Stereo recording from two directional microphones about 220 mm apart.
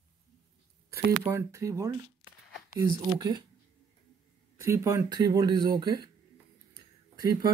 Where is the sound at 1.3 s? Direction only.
15° right (ahead or behind).